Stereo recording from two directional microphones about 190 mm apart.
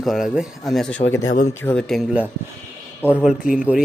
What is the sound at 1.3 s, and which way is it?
Speech, 40° left (ahead or behind).